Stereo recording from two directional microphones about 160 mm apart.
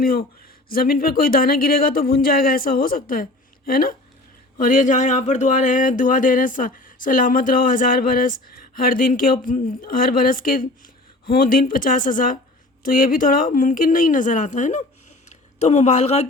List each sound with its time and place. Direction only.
0.0 s speech: 65° left (ahead or behind); by 16.2 s 45° left (ahead or behind)